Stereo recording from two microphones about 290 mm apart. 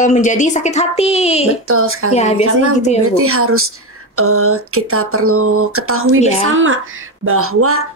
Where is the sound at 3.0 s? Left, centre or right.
Right.